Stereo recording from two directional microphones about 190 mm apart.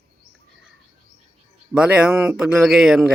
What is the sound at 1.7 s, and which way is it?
A man's voice, 5° right (ahead or behind).